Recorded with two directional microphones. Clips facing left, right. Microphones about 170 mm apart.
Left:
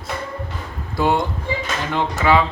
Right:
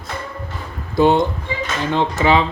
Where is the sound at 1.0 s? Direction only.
20° right (ahead or behind).